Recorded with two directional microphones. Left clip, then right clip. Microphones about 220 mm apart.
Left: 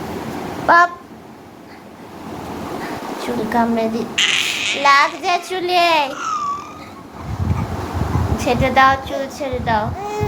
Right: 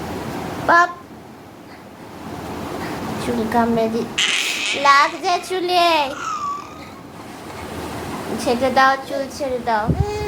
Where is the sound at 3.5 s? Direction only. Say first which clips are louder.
Even; 10° left (ahead or behind).